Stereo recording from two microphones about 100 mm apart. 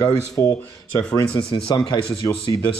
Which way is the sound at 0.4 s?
25° left (ahead or behind).